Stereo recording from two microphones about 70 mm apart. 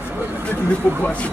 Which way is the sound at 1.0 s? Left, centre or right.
Centre.